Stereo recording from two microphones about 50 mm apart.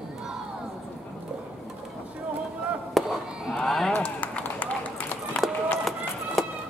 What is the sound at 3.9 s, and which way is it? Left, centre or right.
Run, left.